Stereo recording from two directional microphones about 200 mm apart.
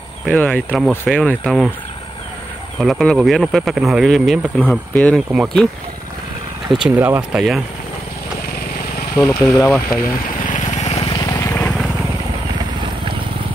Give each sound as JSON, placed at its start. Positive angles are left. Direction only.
{"t": 0.3, "sound": "speech", "side_deg": 5}
{"t": 2.8, "sound": "speech", "side_deg": 0}
{"t": 6.7, "sound": "speech", "side_deg": -5}
{"t": 9.6, "sound": "speech", "side_deg": 10}
{"t": 10.4, "sound": "vehicle", "side_deg": 40}